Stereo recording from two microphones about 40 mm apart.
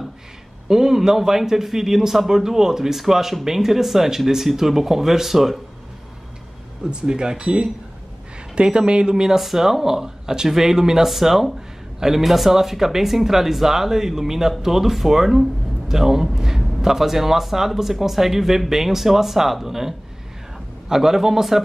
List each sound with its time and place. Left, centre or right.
0.7 s a man's voice: centre
6.8 s speech: right
9.4 s a man's voice: centre